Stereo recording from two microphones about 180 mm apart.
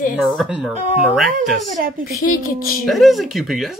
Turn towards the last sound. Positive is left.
turn(degrees=0)  # may be behind; listen again after turning